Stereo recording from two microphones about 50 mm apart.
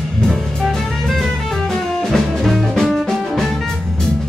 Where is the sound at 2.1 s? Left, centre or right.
Centre.